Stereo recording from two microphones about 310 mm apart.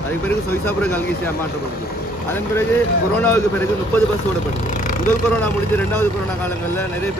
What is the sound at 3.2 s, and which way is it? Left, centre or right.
Speech, centre.